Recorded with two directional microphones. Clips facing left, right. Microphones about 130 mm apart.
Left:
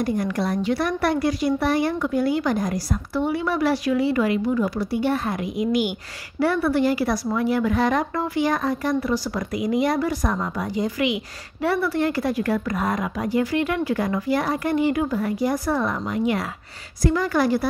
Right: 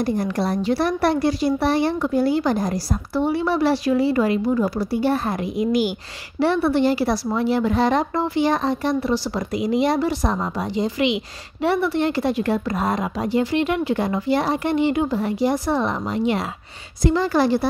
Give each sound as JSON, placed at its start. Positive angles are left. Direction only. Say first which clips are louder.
{"t": 0.0, "sound": "a woman's voice", "louder": "right 1 dB", "side_deg": -35}